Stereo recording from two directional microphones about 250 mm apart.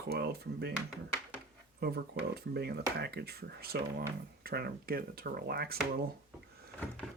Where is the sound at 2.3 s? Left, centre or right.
Right.